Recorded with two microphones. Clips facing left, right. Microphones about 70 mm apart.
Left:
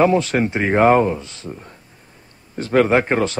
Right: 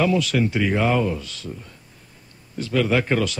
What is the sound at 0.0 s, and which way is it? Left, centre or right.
A man's voice, left.